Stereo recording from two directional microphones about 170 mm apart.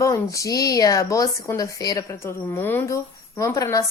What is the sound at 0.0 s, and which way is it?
Speech, 20° left (ahead or behind).